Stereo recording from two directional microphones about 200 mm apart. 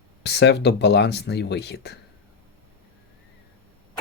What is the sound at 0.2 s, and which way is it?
Speech, 55° left (ahead or behind).